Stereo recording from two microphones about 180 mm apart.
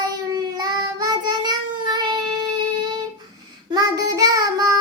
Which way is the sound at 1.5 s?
20° right (ahead or behind).